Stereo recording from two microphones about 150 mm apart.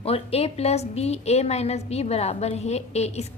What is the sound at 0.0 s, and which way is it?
A woman's voice, 40° left (ahead or behind).